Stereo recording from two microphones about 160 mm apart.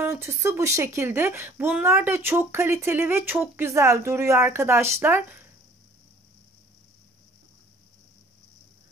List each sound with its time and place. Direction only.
0.0 s speech: 15° right (ahead or behind)